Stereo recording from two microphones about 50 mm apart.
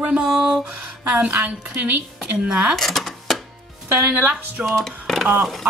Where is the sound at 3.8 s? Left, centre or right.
Right.